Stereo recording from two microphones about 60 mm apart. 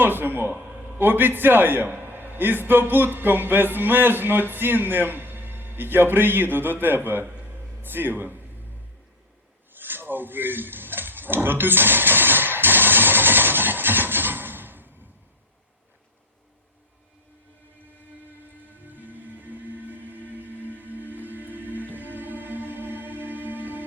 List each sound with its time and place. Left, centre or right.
0.0 s a man's voice: right
9.7 s a sound: right
18.9 s music: right